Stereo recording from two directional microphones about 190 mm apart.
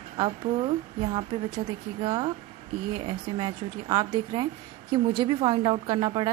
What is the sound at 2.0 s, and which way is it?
A woman's voice, 25° right (ahead or behind).